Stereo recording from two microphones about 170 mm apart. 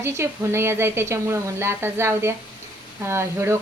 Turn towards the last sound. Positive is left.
turn(degrees=-15)  # may be behind; listen again after turning